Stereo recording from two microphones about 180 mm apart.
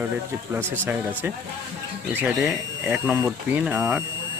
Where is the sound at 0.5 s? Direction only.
10° right (ahead or behind).